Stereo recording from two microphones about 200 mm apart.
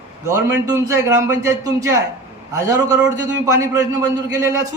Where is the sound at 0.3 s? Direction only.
15° right (ahead or behind).